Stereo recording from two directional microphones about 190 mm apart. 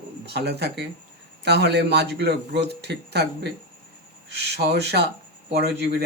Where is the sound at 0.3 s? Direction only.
60° right (ahead or behind).